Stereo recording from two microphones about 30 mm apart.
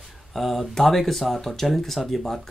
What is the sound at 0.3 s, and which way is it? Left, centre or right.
Speech, centre.